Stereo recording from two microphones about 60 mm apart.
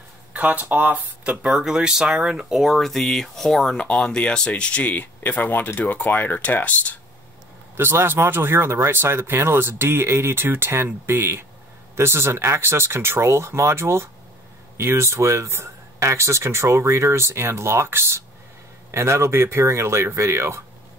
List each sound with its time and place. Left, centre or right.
0.3 s speech: right
1.6 s speech: centre
3.8 s speech: centre
7.7 s speech: right